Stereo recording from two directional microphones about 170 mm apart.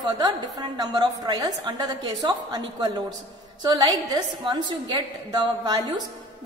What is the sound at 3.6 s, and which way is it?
A woman's voice, 25° right (ahead or behind).